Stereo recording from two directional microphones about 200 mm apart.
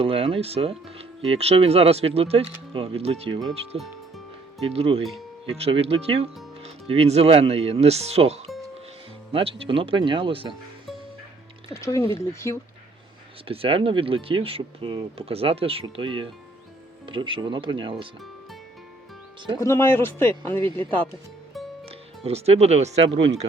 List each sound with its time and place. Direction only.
0.0 s speech: 30° right (ahead or behind)
11.7 s speech: 15° left (ahead or behind)
13.5 s speech: 25° right (ahead or behind)
19.5 s speech: 15° left (ahead or behind)
20.6 s speech: 25° right (ahead or behind)
21.8 s speech: 30° right (ahead or behind)